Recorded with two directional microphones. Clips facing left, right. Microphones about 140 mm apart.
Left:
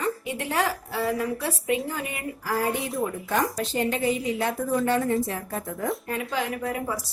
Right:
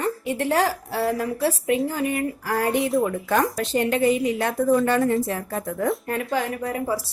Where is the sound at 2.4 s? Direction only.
65° right (ahead or behind).